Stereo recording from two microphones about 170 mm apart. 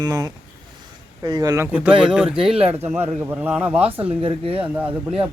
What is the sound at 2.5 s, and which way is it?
Speech, 35° right (ahead or behind).